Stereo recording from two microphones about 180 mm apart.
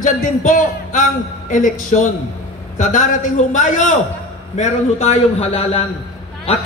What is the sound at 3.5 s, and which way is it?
A man's voice, 45° left (ahead or behind).